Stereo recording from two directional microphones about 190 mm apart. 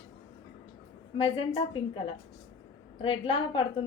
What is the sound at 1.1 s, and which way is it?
Speech, 30° left (ahead or behind).